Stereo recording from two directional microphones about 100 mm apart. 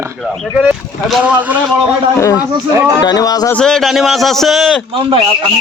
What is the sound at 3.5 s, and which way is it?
A man's voice, 5° left (ahead or behind).